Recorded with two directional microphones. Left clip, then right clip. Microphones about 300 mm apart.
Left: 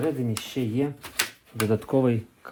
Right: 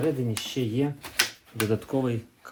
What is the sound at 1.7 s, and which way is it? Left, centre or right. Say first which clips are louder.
Speech: left 6 dB; centre.